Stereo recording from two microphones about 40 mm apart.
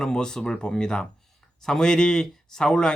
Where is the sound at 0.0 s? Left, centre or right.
Centre.